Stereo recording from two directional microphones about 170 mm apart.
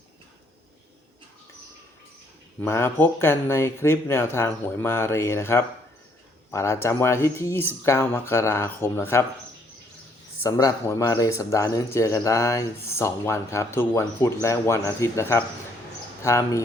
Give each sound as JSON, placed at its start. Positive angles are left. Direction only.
{"t": 2.6, "sound": "speech", "side_deg": 15}
{"t": 10.4, "sound": "speech", "side_deg": 15}